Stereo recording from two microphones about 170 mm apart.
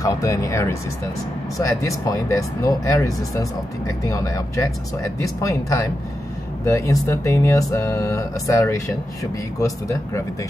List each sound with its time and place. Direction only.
0.0 s speech: 20° left (ahead or behind)